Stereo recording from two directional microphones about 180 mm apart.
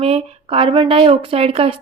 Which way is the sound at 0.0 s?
35° right (ahead or behind).